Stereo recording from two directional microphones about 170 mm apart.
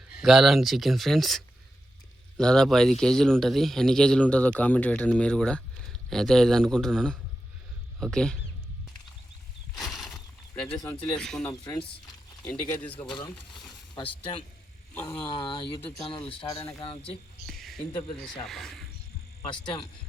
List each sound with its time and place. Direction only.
0.2 s a man's voice: centre (ahead or behind)
9.7 s horse: centre (ahead or behind)
10.6 s a man's voice: 5° left (ahead or behind)
11.6 s speech: 25° left (ahead or behind)
12.5 s speech: 10° left (ahead or behind)
13.9 s speech: 30° left (ahead or behind)
17.4 s a sound: centre (ahead or behind)
18.2 s a man's voice: centre (ahead or behind)